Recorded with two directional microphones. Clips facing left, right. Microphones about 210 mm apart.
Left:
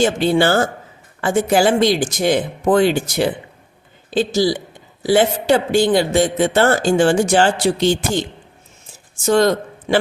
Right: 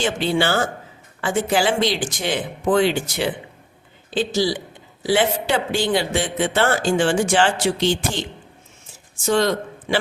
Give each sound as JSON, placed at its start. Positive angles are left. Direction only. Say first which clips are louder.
{"t": 0.0, "sound": "a man's voice", "louder": "left 6 dB", "side_deg": 45}
{"t": 9.2, "sound": "a man's voice", "louder": "left 4 dB", "side_deg": 45}